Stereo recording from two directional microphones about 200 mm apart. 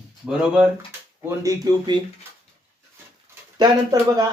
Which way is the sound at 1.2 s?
15° right (ahead or behind).